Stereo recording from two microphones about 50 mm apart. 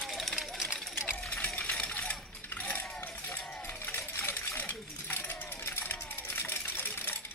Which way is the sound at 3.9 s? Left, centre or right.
Left.